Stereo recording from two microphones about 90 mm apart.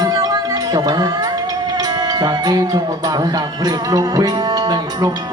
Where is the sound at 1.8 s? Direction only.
45° right (ahead or behind).